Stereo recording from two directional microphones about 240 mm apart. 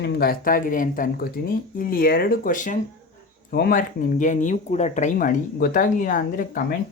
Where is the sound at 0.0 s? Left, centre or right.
Left.